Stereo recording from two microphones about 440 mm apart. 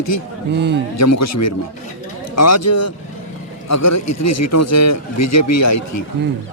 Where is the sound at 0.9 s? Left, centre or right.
Left.